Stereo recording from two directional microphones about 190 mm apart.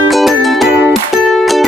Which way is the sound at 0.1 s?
Centre (ahead or behind).